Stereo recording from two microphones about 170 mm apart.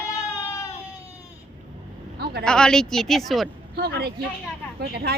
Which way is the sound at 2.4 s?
5° left (ahead or behind).